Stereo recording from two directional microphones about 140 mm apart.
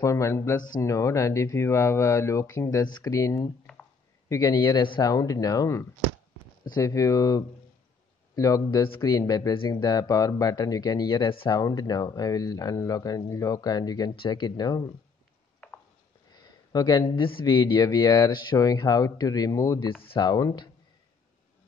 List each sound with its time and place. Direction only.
0.0 s speech: 20° left (ahead or behind)
15.6 s a sound: 10° left (ahead or behind)
16.3 s speech: 25° left (ahead or behind)